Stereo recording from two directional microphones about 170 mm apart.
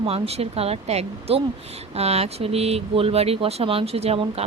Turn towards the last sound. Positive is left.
turn(degrees=-35)  # may be behind; listen again after turning